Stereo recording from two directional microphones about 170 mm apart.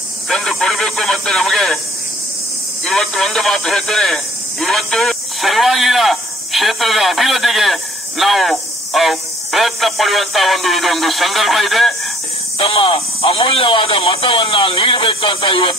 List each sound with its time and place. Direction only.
0.3 s a man's voice: centre (ahead or behind)
2.8 s a man's voice: 5° left (ahead or behind)
12.5 s speech: 30° left (ahead or behind)